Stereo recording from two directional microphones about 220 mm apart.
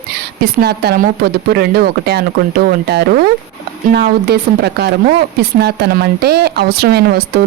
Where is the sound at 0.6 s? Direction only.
45° right (ahead or behind).